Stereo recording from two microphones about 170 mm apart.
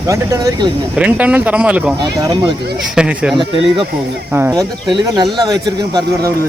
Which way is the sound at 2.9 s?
5° right (ahead or behind).